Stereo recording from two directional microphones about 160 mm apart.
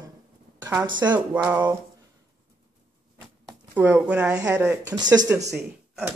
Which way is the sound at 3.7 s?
10° right (ahead or behind).